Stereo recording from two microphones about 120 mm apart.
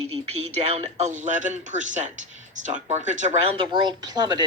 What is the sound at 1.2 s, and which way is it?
Speech, 90° right.